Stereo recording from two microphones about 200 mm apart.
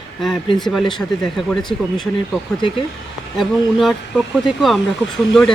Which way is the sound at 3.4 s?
Centre (ahead or behind).